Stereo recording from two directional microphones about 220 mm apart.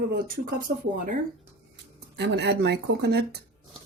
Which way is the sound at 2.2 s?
50° right (ahead or behind).